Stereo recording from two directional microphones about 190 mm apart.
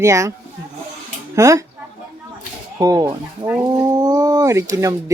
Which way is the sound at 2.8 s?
20° right (ahead or behind).